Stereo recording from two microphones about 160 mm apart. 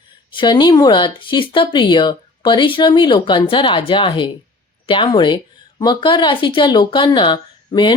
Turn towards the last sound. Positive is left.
turn(degrees=30)  # may be behind; listen again after turning